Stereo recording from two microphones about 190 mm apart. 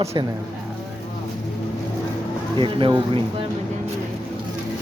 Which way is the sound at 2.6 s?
25° right (ahead or behind).